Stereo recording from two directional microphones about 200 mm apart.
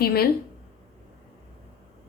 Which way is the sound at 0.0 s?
50° left (ahead or behind).